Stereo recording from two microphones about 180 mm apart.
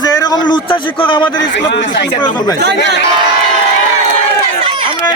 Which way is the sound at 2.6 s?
70° right (ahead or behind).